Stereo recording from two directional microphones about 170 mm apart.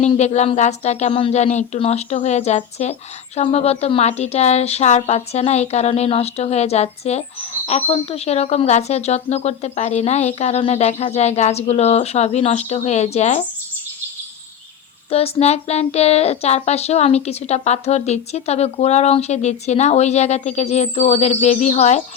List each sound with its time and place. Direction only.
0.0 s speech: 40° left (ahead or behind)
15.1 s speech: 35° left (ahead or behind)